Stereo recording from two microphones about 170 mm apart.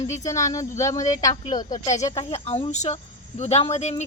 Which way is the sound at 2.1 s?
40° left (ahead or behind).